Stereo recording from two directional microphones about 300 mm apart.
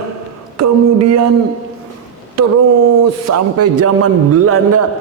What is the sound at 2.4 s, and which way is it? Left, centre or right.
A man's voice, right.